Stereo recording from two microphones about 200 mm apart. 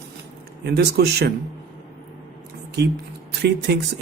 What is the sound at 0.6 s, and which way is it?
Speech, 55° right (ahead or behind).